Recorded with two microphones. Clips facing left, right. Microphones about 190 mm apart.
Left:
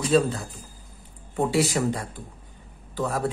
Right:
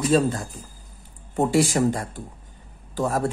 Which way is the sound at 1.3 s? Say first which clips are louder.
Right 3 dB; 45° right (ahead or behind).